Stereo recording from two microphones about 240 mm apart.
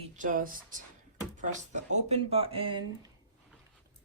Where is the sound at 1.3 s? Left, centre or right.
Right.